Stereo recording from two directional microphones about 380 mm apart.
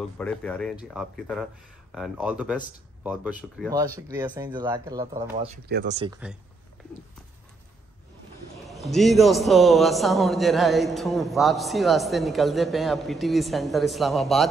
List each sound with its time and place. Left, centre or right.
0.2 s a man's voice: centre
5.7 s speech: right
6.2 s a man's voice: centre
8.6 s a man's voice: centre